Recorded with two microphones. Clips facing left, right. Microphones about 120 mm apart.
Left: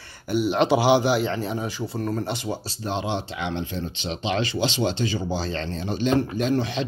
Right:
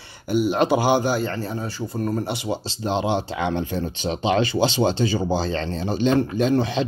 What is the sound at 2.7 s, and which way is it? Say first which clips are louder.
Speech: right 6 dB; 30° right (ahead or behind).